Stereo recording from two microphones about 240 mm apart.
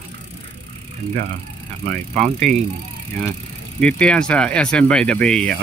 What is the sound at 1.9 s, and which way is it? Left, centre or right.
Speech, right.